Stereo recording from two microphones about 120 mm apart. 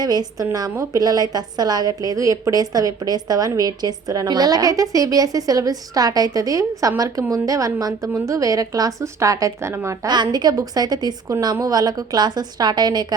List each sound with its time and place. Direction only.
0.0 s a woman's voice: 35° right (ahead or behind)
10.1 s a woman's voice: 35° right (ahead or behind)